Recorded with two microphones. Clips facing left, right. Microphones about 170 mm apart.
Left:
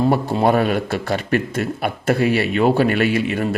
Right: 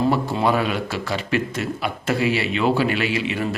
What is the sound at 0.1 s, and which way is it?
A man's voice, 50° left (ahead or behind).